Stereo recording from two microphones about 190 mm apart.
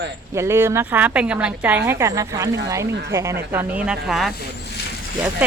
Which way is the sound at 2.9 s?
65° right (ahead or behind).